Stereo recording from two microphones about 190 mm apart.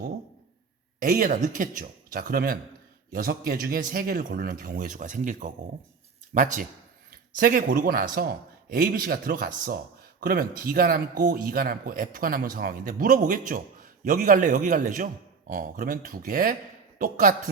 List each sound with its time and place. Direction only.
0.9 s a man's voice: 45° right (ahead or behind)